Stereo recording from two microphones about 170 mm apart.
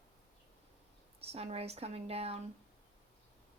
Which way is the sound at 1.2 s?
35° right (ahead or behind).